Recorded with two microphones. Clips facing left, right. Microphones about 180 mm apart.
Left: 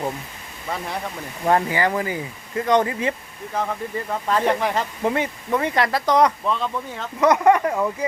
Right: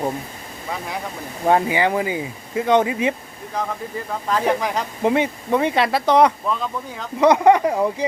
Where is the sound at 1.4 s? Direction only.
15° right (ahead or behind).